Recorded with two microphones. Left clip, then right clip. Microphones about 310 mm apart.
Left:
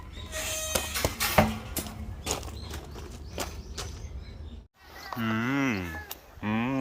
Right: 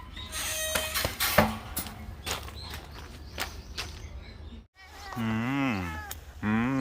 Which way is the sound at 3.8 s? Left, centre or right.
Left.